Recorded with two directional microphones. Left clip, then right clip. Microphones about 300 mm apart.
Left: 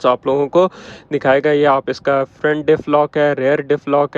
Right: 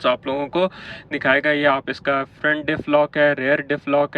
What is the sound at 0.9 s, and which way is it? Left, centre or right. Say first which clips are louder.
Speech: left 4 dB; left.